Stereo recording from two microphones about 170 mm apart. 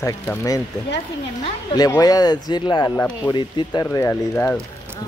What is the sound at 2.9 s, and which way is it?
Speech, 10° left (ahead or behind).